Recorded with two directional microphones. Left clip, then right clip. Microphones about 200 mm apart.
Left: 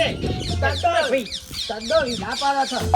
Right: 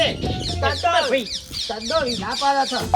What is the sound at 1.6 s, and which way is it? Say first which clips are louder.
Speech: left 2 dB; 30° right (ahead or behind).